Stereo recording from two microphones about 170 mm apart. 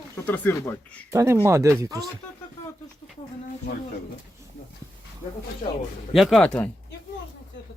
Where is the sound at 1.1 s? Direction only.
20° right (ahead or behind).